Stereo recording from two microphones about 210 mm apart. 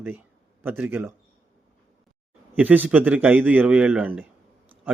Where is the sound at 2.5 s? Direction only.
10° right (ahead or behind).